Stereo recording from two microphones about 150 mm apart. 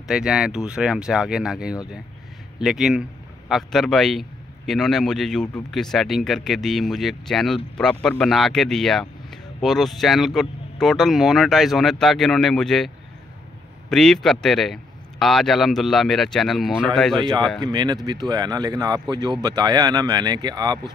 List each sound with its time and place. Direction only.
0.1 s a man's voice: 5° right (ahead or behind)
17.6 s speech: 25° right (ahead or behind)